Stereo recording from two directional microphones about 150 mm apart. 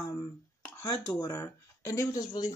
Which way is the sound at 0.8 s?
25° left (ahead or behind).